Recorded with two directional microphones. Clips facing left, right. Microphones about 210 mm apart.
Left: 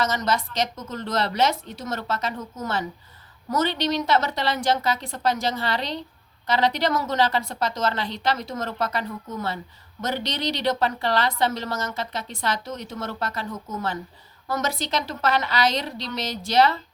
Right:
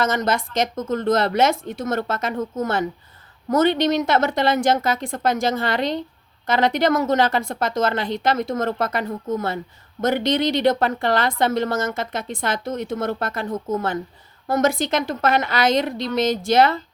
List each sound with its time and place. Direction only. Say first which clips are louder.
0.0 s a woman's voice: right 3 dB; 50° right (ahead or behind)